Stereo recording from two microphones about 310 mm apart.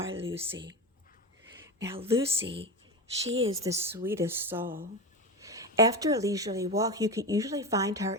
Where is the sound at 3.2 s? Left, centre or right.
Right.